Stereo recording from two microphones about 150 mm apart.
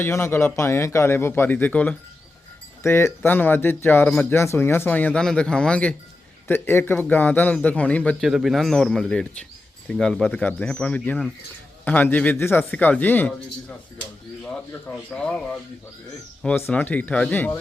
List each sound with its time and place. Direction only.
0.0 s a man's voice: 15° left (ahead or behind)
8.3 s a man's voice: centre (ahead or behind)